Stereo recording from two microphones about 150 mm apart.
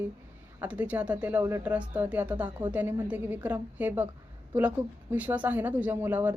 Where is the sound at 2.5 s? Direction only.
30° right (ahead or behind).